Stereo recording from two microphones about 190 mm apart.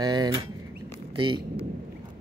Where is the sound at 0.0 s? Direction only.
20° right (ahead or behind).